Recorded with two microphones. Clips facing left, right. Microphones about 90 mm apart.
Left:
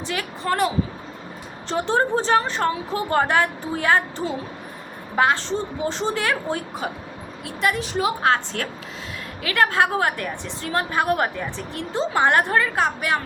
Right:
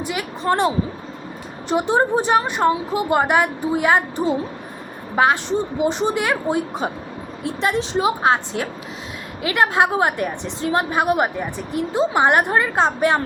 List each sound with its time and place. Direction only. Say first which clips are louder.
0.0 s a woman's voice: right 3 dB; 15° right (ahead or behind)
1.7 s a woman's voice: right 3 dB; 15° right (ahead or behind)